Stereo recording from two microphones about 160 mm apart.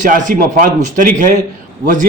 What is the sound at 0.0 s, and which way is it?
A man's voice, 55° right (ahead or behind).